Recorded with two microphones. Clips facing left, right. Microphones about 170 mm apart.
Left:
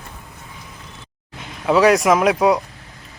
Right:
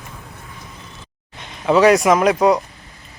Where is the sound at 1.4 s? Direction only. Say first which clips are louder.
Right 1 dB; centre (ahead or behind).